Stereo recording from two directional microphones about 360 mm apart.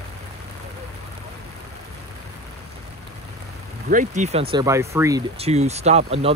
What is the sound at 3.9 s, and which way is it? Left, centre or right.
Speech, right.